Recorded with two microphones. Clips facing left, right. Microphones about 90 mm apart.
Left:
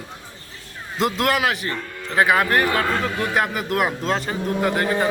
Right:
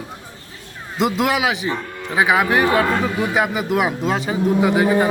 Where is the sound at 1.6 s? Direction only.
15° right (ahead or behind).